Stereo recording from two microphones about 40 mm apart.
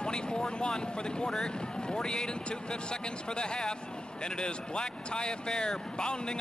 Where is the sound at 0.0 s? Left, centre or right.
Left.